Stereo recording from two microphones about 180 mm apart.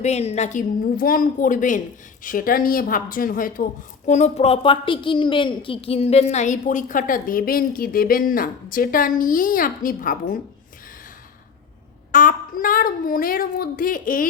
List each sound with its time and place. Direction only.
0.0 s speech: 35° left (ahead or behind)
12.1 s speech: 50° left (ahead or behind)